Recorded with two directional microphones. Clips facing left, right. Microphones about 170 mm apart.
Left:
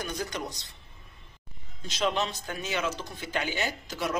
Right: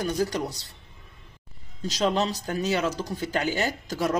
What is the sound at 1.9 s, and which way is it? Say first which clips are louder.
Speech: right 4 dB; 35° right (ahead or behind).